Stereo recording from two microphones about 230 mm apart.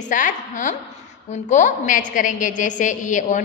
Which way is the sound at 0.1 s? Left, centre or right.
Left.